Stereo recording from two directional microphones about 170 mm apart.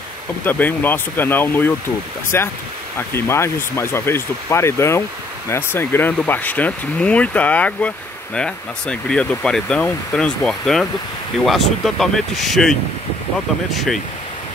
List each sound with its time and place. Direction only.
0.5 s speech: 10° left (ahead or behind)